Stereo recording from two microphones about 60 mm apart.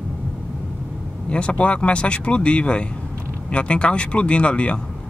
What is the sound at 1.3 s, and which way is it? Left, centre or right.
Speech, centre.